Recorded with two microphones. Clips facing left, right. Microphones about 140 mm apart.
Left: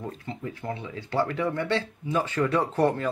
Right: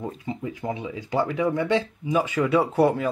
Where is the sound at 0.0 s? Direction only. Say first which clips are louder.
Right 4 dB; 15° right (ahead or behind).